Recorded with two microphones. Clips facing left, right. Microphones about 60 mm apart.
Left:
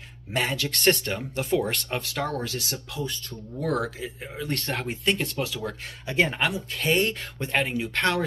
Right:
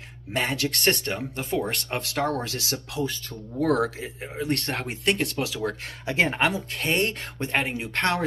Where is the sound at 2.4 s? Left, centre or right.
Right.